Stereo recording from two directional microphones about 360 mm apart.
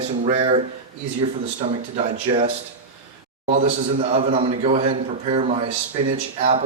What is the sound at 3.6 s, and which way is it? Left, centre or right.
A man's voice, right.